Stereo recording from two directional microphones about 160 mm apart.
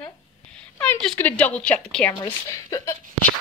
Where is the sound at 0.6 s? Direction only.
5° left (ahead or behind).